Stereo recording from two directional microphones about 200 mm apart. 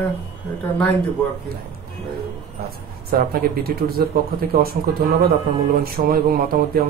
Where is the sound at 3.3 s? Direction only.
50° right (ahead or behind).